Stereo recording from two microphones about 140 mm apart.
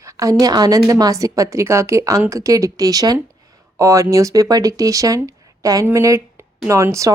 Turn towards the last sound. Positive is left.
turn(degrees=-20)  # may be behind; listen again after turning